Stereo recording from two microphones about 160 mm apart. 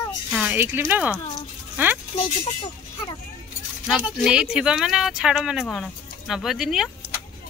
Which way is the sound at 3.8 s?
5° right (ahead or behind).